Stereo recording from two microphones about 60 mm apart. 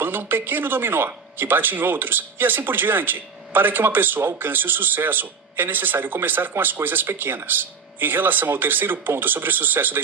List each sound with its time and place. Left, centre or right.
0.0 s speech: right